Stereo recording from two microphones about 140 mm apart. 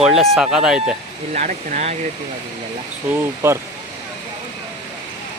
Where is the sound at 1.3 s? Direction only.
65° right (ahead or behind).